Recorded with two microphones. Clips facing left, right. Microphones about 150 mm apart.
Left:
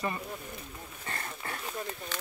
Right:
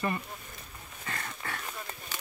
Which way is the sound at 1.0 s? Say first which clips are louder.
Right 1 dB; 30° left (ahead or behind).